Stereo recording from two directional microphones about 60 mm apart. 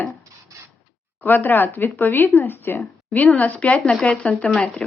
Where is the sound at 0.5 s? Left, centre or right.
Right.